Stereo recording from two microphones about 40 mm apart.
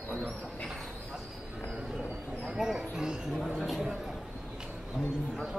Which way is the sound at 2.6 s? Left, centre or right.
Centre.